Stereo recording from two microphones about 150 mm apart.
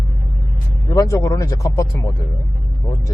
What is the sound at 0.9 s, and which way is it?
Speech, 20° left (ahead or behind).